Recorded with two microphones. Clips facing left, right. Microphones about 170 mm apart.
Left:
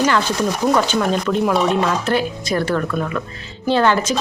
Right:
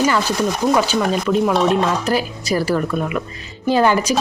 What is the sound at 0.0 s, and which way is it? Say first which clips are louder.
Speech: even; 5° right (ahead or behind).